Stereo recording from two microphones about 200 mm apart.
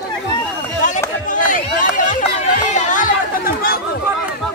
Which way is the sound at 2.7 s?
40° left (ahead or behind).